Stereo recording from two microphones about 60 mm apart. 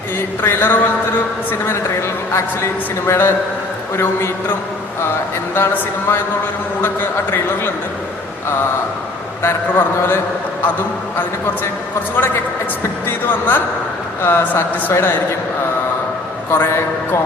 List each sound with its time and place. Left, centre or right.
0.2 s a man's voice: left
5.7 s a man's voice: left
9.4 s a man's voice: left
12.1 s a man's voice: left
16.6 s a man's voice: left